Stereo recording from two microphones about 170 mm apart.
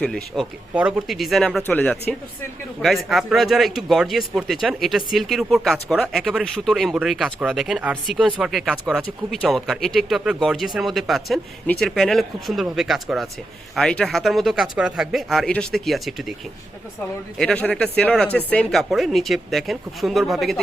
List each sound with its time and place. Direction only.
0.0 s speech: centre (ahead or behind)
17.3 s speech: 5° left (ahead or behind)